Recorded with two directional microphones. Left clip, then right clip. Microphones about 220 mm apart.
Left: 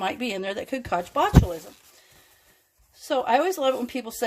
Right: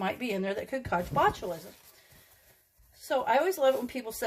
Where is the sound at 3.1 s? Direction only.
40° left (ahead or behind).